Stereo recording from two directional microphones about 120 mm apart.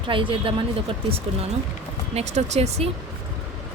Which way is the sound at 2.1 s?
65° right (ahead or behind).